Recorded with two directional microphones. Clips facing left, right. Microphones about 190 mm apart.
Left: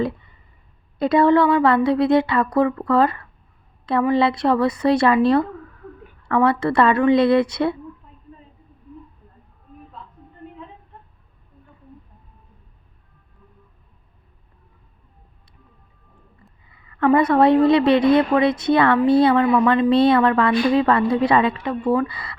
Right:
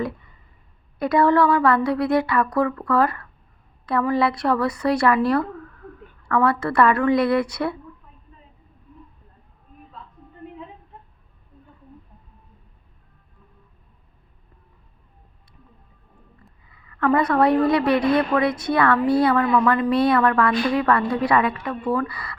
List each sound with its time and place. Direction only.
0.9 s a woman's voice: 25° left (ahead or behind)
16.9 s a woman's voice: 25° left (ahead or behind)